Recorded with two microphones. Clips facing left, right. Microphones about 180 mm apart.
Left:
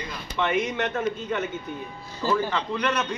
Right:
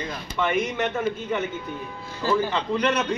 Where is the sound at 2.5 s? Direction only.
20° right (ahead or behind).